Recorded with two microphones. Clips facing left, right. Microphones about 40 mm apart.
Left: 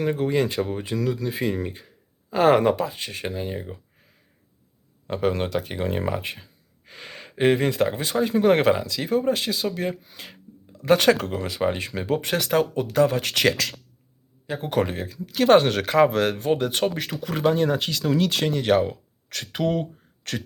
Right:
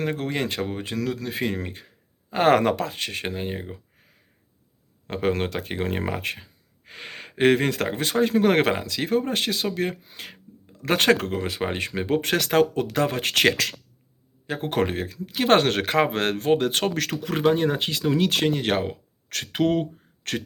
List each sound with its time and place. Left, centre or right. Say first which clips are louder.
0.0 s speech: left 4 dB; right
2.5 s speech: even; right
5.0 s speech: left 1 dB; right
14.4 s speech: even; right
16.9 s speech: right 3 dB; right
17.2 s speech: even; right
18.2 s speech: right 1 dB; right